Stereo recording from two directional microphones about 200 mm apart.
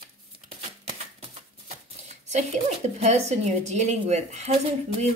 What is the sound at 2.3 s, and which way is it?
Speech, 35° right (ahead or behind).